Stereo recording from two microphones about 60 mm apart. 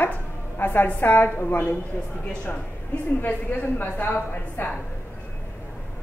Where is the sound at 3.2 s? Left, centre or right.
Left.